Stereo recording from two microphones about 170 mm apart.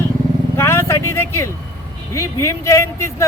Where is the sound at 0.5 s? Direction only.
15° left (ahead or behind).